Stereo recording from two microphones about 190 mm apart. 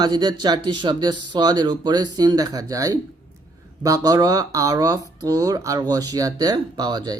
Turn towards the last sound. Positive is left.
turn(degrees=-20)  # may be behind; listen again after turning